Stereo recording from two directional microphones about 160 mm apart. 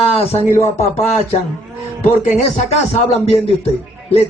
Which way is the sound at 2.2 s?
45° left (ahead or behind).